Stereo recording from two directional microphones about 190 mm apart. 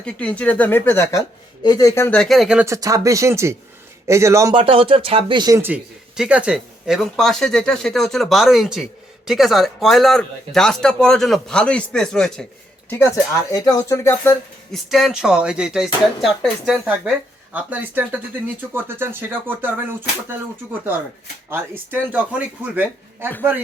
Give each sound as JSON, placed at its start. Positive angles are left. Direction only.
{"t": 0.0, "sound": "speech", "side_deg": 5}
{"t": 2.6, "sound": "speech", "side_deg": -15}
{"t": 4.5, "sound": "speech", "side_deg": -30}
{"t": 12.9, "sound": "speech", "side_deg": 15}
{"t": 14.8, "sound": "speech", "side_deg": 0}
{"t": 21.5, "sound": "speech", "side_deg": -10}